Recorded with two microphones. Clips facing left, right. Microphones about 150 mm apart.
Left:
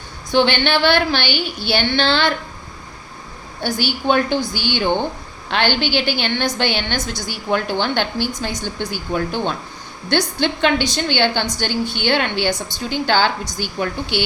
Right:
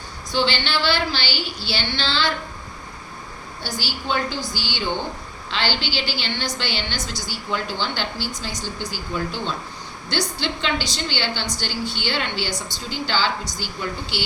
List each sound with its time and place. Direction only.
0.3 s speech: 60° left (ahead or behind)
3.6 s speech: 55° left (ahead or behind)